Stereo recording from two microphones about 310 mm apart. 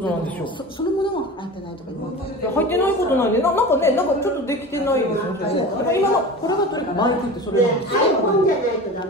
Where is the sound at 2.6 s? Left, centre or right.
Centre.